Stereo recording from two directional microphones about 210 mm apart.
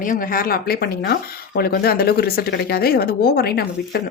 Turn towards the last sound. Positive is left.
turn(degrees=50)  # may be behind; listen again after turning